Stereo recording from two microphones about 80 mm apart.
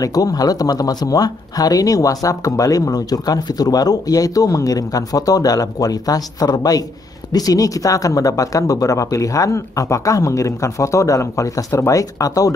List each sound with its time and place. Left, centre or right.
0.0 s speech: left